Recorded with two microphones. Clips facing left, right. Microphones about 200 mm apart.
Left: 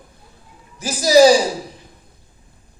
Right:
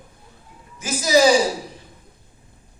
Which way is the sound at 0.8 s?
35° left (ahead or behind).